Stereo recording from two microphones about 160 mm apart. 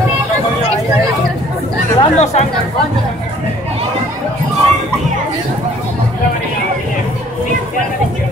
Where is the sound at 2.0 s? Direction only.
45° left (ahead or behind).